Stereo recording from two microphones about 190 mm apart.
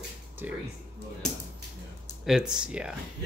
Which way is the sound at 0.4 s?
10° right (ahead or behind).